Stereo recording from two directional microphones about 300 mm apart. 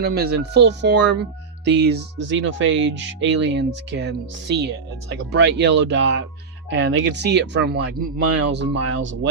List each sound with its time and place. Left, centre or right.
0.0 s speech: right